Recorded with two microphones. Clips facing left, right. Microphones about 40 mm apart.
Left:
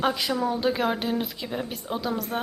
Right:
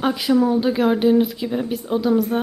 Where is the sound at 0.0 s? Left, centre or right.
Centre.